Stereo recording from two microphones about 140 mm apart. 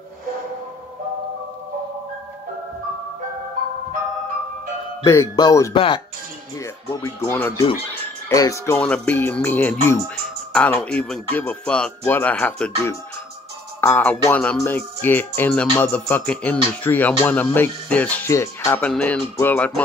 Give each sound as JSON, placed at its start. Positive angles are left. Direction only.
{"t": 5.0, "sound": "speech", "side_deg": 20}
{"t": 8.7, "sound": "speech", "side_deg": 5}
{"t": 13.7, "sound": "speech", "side_deg": 15}
{"t": 18.8, "sound": "speech", "side_deg": 10}